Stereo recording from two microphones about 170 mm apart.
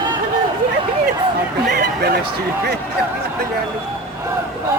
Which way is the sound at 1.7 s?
70° right (ahead or behind).